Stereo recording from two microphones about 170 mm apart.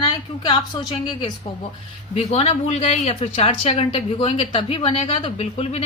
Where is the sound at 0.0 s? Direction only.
30° left (ahead or behind).